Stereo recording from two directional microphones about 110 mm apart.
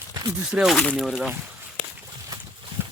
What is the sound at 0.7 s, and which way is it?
Speech, 10° left (ahead or behind).